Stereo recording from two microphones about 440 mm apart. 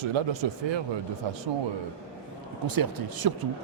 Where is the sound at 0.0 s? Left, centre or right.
Right.